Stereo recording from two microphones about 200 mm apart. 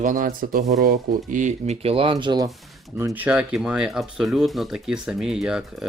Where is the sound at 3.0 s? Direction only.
10° right (ahead or behind).